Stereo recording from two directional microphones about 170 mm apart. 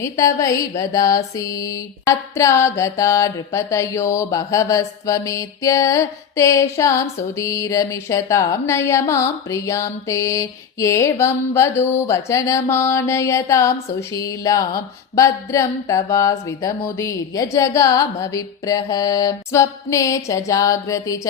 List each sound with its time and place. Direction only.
0.0 s mantra: 20° left (ahead or behind)